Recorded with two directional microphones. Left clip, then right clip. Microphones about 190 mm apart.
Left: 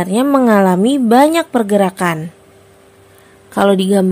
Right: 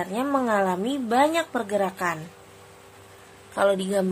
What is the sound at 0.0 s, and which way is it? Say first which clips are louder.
A woman's voice: left 12 dB; 55° left (ahead or behind).